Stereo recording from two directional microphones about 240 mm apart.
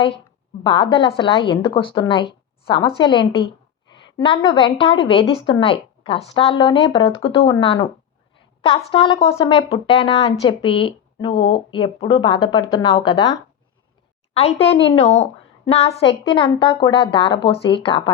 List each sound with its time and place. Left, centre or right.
0.6 s a woman's voice: centre
14.3 s a woman's voice: left